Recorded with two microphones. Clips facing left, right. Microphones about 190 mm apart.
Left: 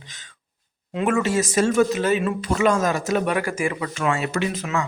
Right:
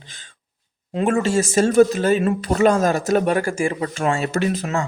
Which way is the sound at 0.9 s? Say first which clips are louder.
Right 2 dB; 30° right (ahead or behind).